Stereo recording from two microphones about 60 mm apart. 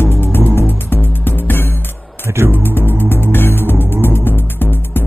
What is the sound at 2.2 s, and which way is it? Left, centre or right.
Music, right.